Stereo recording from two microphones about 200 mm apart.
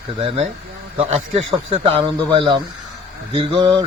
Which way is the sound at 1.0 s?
30° right (ahead or behind).